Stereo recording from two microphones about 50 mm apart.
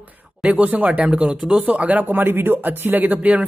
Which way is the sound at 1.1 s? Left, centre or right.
Right.